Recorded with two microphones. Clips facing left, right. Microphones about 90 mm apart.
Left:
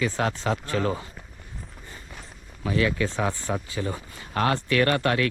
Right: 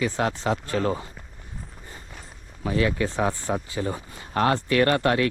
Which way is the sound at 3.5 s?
55° right (ahead or behind).